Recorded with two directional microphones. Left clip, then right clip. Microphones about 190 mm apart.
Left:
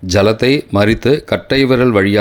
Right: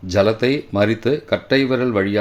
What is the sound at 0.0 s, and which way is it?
Speech, 35° left (ahead or behind).